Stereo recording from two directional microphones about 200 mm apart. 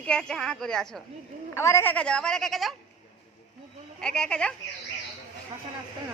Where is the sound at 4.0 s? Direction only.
5° left (ahead or behind).